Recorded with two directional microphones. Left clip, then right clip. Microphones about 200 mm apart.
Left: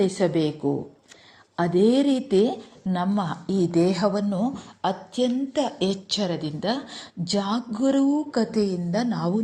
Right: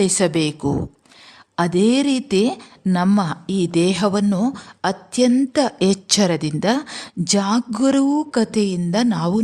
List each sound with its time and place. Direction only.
0.0 s a woman's voice: 30° right (ahead or behind)
5.8 s speech: 90° right
6.1 s a woman's voice: 40° right (ahead or behind)